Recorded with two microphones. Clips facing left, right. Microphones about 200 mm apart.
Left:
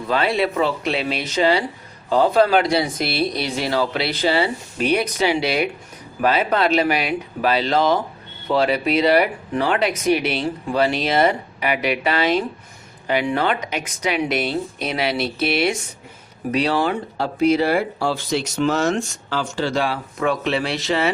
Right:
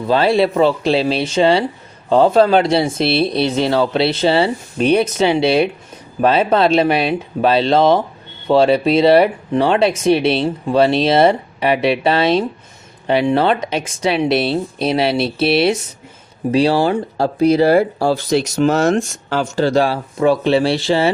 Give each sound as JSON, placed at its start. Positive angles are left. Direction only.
{"t": 0.1, "sound": "speech", "side_deg": -30}
{"t": 18.9, "sound": "speech", "side_deg": -50}